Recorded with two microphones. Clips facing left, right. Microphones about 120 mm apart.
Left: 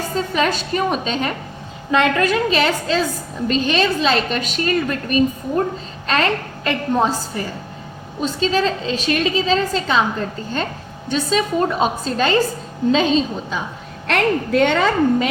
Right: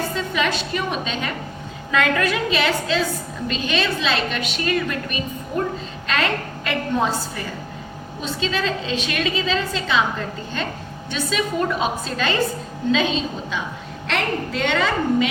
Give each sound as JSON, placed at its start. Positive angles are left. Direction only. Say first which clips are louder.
{"t": 0.1, "sound": "a woman's voice", "louder": "left 3 dB", "side_deg": 40}
{"t": 14.1, "sound": "a woman's voice", "louder": "left 6 dB", "side_deg": 50}